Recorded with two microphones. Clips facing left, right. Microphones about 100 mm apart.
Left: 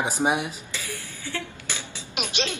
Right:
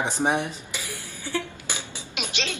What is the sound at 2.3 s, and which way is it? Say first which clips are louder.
Speech: left 3 dB; 15° left (ahead or behind).